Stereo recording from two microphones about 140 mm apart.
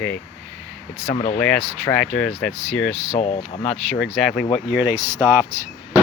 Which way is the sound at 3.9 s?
Centre (ahead or behind).